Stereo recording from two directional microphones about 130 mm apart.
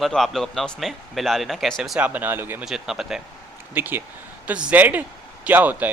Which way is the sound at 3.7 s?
15° right (ahead or behind).